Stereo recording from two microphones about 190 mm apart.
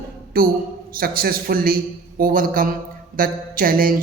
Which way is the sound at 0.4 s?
50° right (ahead or behind).